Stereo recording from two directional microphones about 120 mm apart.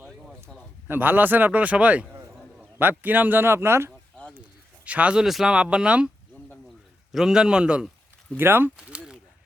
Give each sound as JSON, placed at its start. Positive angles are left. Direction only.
{"t": 0.9, "sound": "speech", "side_deg": -15}
{"t": 7.1, "sound": "a man's voice", "side_deg": -5}